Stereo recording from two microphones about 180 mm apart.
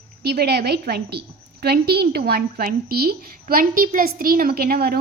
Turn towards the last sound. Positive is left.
turn(degrees=-55)  # may be behind; listen again after turning